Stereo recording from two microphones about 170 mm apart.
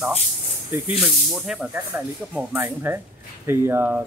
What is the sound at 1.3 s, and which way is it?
Speech, 5° right (ahead or behind).